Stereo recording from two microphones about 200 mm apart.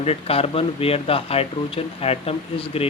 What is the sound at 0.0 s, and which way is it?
A man's voice, 30° left (ahead or behind).